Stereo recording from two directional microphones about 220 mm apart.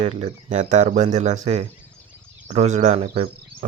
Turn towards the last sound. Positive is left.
turn(degrees=-30)  # may be behind; listen again after turning